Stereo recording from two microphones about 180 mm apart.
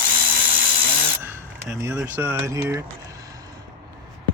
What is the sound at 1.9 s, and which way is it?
Speech, 10° right (ahead or behind).